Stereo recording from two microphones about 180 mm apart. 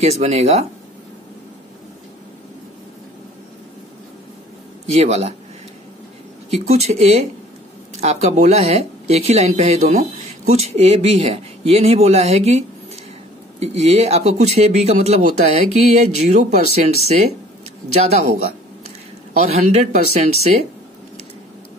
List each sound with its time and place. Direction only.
0.0 s speech: 35° right (ahead or behind)
4.9 s speech: 35° right (ahead or behind)
6.5 s speech: 35° right (ahead or behind)
19.3 s speech: 35° right (ahead or behind)